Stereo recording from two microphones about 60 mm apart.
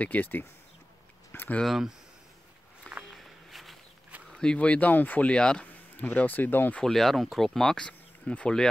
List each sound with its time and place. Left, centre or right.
0.0 s speech: left
1.6 s speech: centre
2.9 s walk: centre
3.2 s a sound: centre
4.3 s speech: centre; by 6.7 s left
6.8 s speech: centre
7.8 s speech: centre